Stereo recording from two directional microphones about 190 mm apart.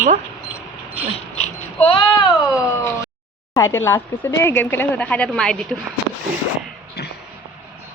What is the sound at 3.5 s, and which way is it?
A woman's voice, 15° left (ahead or behind).